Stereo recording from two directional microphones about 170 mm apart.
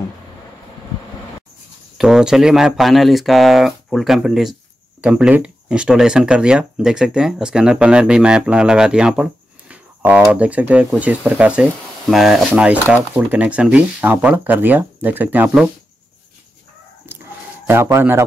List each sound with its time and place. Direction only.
2.0 s speech: 5° right (ahead or behind)
17.6 s speech: 15° right (ahead or behind)